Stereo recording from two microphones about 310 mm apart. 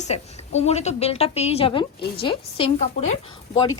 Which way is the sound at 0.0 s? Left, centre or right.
Left.